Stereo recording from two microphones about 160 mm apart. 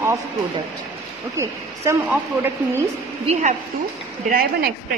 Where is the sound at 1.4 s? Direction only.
15° right (ahead or behind).